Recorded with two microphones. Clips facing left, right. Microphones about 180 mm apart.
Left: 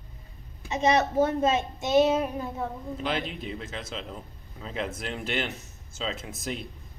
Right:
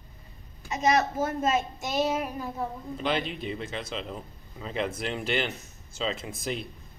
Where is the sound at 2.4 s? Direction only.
Centre (ahead or behind).